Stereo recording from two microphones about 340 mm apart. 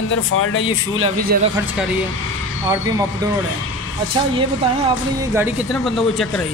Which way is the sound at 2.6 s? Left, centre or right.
Centre.